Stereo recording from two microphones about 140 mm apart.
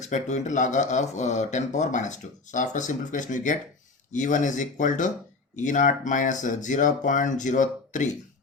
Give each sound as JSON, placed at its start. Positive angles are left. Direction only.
{"t": 0.0, "sound": "speech", "side_deg": 55}